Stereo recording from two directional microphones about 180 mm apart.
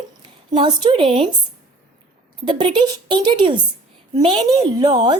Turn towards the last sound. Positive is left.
turn(degrees=-25)  # may be behind; listen again after turning